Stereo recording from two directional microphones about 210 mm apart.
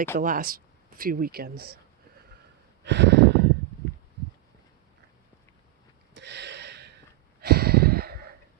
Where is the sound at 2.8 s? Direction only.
55° right (ahead or behind).